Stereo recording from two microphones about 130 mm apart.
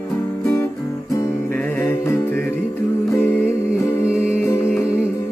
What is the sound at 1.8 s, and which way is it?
Music, 15° left (ahead or behind).